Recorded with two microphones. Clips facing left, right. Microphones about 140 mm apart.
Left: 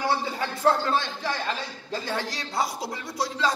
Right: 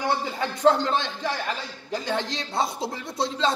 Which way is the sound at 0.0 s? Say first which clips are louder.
Right 1 dB; 20° right (ahead or behind).